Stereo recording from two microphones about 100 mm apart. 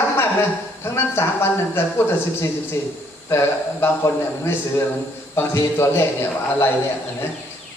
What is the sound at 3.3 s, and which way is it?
Speech, 25° left (ahead or behind).